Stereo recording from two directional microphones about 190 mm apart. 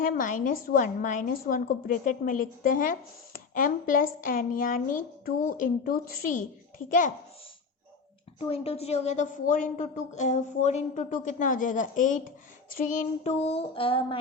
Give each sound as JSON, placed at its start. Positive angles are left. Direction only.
{"t": 0.0, "sound": "a woman's voice", "side_deg": 45}
{"t": 8.4, "sound": "a woman's voice", "side_deg": 30}